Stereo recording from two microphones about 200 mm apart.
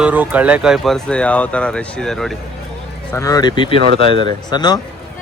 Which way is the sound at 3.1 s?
15° left (ahead or behind).